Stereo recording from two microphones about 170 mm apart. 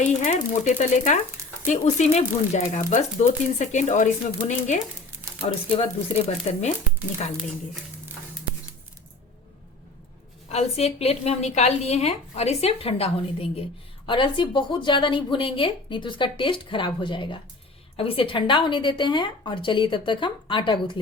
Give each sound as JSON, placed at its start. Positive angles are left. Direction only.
{"t": 0.0, "sound": "a woman's voice", "side_deg": 45}
{"t": 10.5, "sound": "a woman's voice", "side_deg": 40}